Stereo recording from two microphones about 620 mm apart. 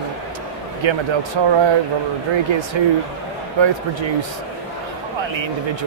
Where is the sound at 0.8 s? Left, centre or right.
Right.